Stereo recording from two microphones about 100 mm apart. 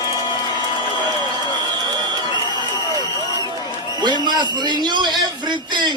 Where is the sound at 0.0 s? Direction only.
35° left (ahead or behind).